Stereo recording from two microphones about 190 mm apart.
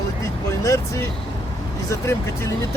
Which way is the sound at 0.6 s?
15° left (ahead or behind).